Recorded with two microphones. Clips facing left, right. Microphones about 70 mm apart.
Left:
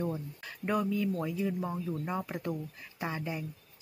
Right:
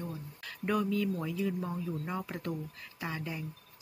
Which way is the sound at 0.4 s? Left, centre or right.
Centre.